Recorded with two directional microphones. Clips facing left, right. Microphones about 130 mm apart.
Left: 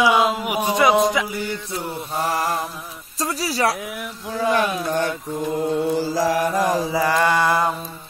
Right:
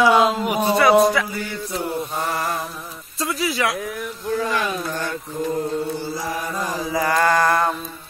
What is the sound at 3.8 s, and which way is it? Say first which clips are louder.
Mantra: right 2 dB; 10° left (ahead or behind).